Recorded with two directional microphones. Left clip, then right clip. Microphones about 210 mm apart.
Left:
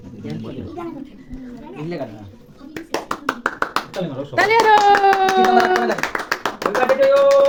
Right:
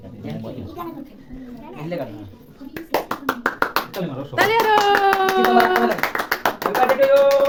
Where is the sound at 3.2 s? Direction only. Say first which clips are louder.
Even; 15° left (ahead or behind).